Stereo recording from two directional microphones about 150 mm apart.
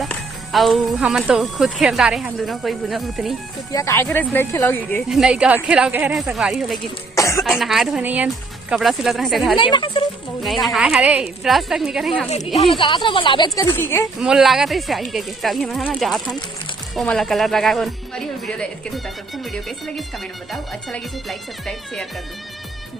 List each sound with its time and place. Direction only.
0.0 s speech: centre (ahead or behind)
3.7 s speech: 20° left (ahead or behind)
5.0 s speech: 5° right (ahead or behind)
7.2 s cough: 20° left (ahead or behind)
7.4 s speech: centre (ahead or behind)
9.6 s speech: 35° left (ahead or behind)
10.4 s speech: centre (ahead or behind)
12.5 s speech: 35° left (ahead or behind)
13.6 s speech: 15° left (ahead or behind)
14.2 s speech: 5° right (ahead or behind)